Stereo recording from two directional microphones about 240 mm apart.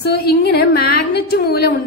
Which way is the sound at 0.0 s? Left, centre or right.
Left.